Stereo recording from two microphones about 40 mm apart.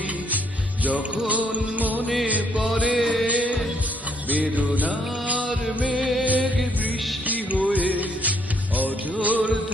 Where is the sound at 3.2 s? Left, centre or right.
Right.